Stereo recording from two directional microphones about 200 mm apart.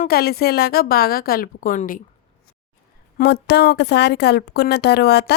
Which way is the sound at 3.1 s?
60° left (ahead or behind).